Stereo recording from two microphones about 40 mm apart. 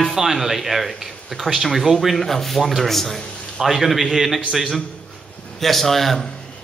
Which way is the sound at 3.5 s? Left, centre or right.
Centre.